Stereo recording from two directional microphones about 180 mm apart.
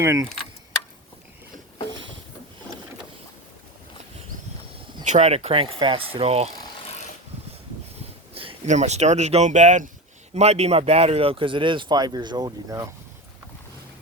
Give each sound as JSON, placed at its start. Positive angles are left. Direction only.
{"t": 0.0, "sound": "speech", "side_deg": -15}
{"t": 5.0, "sound": "speech", "side_deg": -35}
{"t": 8.3, "sound": "speech", "side_deg": -30}